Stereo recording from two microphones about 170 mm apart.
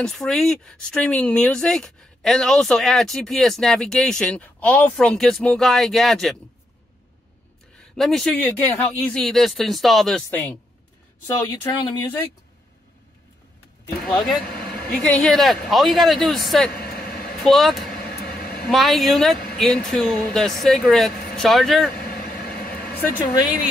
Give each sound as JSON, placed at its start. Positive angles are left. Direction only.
{"t": 0.0, "sound": "speech", "side_deg": 0}
{"t": 7.9, "sound": "speech", "side_deg": 0}
{"t": 14.0, "sound": "speech", "side_deg": 0}
{"t": 14.4, "sound": "vehicle", "side_deg": 65}
{"t": 15.0, "sound": "speech", "side_deg": 5}
{"t": 18.2, "sound": "a sound", "side_deg": 65}
{"t": 18.7, "sound": "speech", "side_deg": 0}
{"t": 22.0, "sound": "vehicle", "side_deg": 65}